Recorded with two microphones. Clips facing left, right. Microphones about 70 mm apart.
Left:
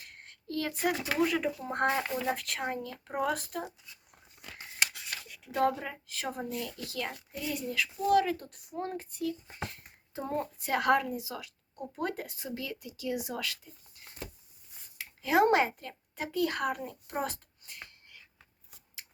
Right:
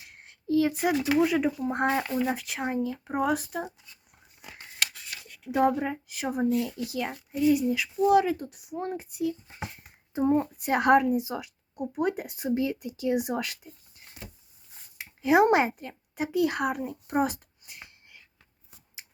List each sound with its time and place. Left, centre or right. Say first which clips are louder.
0.0 s speech: right 6 dB; centre
5.5 s speech: right 5 dB; centre
14.9 s a woman's voice: right 5 dB; centre